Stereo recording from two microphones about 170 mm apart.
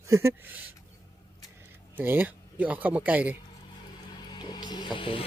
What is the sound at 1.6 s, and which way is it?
Speech, 10° right (ahead or behind).